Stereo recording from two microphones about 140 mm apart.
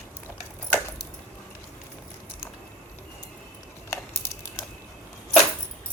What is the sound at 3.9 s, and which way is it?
Typing, 20° left (ahead or behind).